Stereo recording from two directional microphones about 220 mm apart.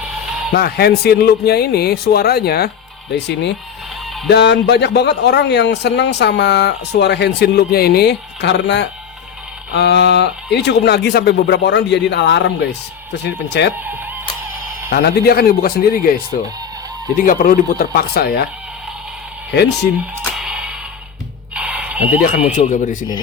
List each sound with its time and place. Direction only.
0.5 s a man's voice: 45° left (ahead or behind)
14.8 s a man's voice: 45° left (ahead or behind)
20.3 s music: 5° right (ahead or behind)
21.5 s a sound: 5° right (ahead or behind)
22.2 s speech: 35° left (ahead or behind)